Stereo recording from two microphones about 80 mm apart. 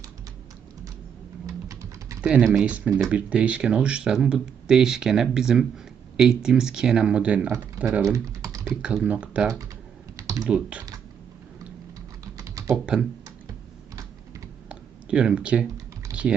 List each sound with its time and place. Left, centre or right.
1.5 s a sound: right
2.4 s speech: centre
8.0 s typing: right
8.7 s speech: centre
10.2 s typing: right
10.5 s speech: centre
12.4 s typing: right
12.7 s speech: centre
13.2 s typing: right
14.7 s a sound: centre